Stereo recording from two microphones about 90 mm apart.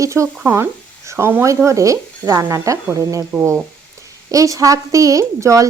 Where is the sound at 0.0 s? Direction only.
35° right (ahead or behind).